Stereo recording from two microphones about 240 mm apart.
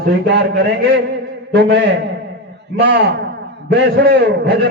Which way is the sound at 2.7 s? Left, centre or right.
Right.